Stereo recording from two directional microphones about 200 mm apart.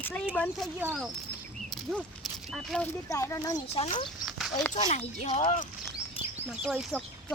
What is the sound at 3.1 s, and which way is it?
Speech, 15° left (ahead or behind).